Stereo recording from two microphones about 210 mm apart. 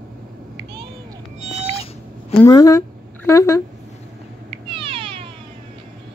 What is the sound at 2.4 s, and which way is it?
A woman's voice, 15° left (ahead or behind).